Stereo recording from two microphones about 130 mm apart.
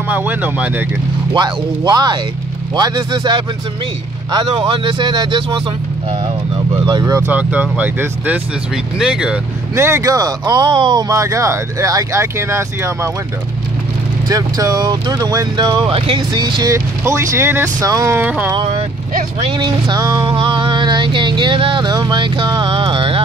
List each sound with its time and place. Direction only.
0.1 s speech: 15° right (ahead or behind)
1.3 s music: 35° right (ahead or behind)
6.9 s music: 30° right (ahead or behind)
7.2 s speech: 10° right (ahead or behind)
9.8 s speech: 20° right (ahead or behind)
14.3 s music: 30° right (ahead or behind)
16.7 s speech: 25° right (ahead or behind)
18.6 s speech: 45° right (ahead or behind)
19.4 s music: 35° right (ahead or behind)